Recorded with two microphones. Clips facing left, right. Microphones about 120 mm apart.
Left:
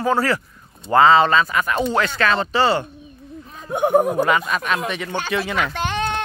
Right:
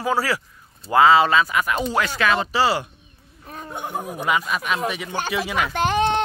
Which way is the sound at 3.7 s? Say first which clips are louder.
Left 13 dB; 65° left (ahead or behind).